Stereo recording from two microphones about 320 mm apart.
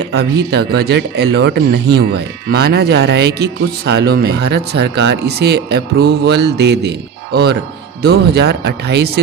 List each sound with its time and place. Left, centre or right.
0.5 s speech: right
8.0 s speech: right